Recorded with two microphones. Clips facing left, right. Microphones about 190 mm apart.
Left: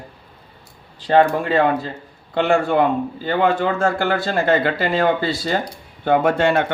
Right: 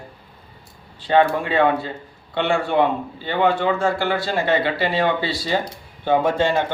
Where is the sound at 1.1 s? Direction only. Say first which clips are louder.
Left 2 dB; 40° left (ahead or behind).